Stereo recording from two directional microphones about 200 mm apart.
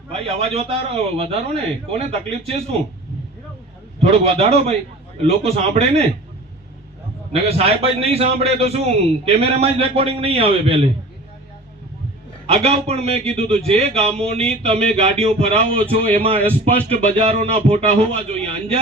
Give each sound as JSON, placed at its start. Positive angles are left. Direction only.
{"t": 0.1, "sound": "speech", "side_deg": -30}
{"t": 4.0, "sound": "speech", "side_deg": -30}
{"t": 7.4, "sound": "a man's voice", "side_deg": -30}
{"t": 12.5, "sound": "speech", "side_deg": -30}